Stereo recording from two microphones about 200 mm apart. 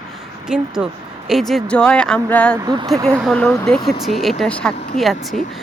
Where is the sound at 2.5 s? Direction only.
20° right (ahead or behind).